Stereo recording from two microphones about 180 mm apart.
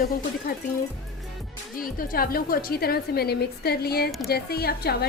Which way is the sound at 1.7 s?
50° left (ahead or behind).